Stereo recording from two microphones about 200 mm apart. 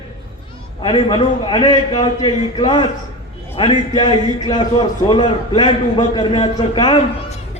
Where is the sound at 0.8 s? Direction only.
25° left (ahead or behind).